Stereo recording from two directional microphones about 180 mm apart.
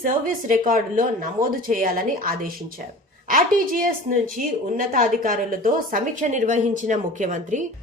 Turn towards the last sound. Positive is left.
turn(degrees=-45)  # may be behind; listen again after turning